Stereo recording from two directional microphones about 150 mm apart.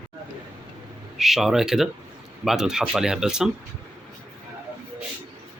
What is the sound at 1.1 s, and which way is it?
Speech, centre (ahead or behind).